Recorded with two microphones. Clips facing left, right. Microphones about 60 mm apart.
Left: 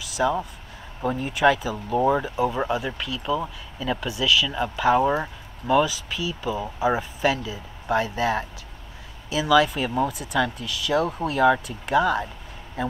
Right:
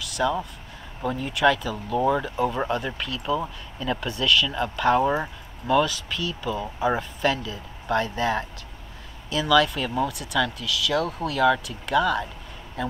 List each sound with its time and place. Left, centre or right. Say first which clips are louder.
0.2 s speech: left 1 dB; centre